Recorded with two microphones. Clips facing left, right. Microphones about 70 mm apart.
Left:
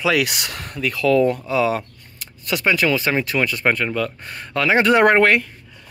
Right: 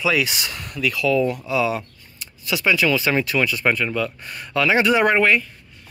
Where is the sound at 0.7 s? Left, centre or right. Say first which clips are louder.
Left 3 dB; left.